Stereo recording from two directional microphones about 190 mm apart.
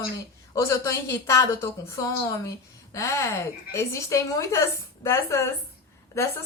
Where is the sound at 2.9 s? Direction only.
15° left (ahead or behind).